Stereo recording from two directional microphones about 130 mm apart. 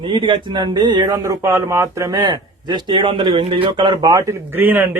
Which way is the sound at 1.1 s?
20° right (ahead or behind).